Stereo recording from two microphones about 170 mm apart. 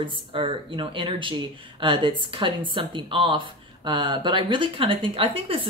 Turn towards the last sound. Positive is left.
turn(degrees=-35)  # may be behind; listen again after turning